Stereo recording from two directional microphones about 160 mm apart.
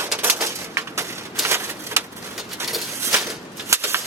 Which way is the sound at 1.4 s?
15° right (ahead or behind).